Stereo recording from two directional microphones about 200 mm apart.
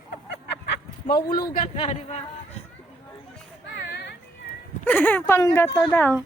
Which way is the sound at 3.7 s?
60° left (ahead or behind).